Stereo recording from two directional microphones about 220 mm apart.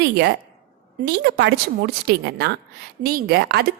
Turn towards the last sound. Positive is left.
turn(degrees=-45)  # may be behind; listen again after turning